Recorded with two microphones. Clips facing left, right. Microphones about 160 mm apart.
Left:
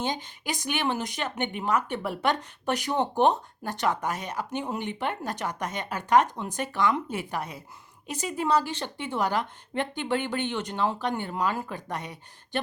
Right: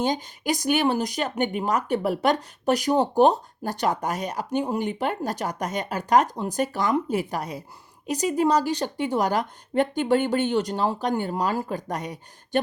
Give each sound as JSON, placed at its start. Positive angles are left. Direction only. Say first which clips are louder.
{"t": 0.0, "sound": "speech", "louder": "right 6 dB", "side_deg": -40}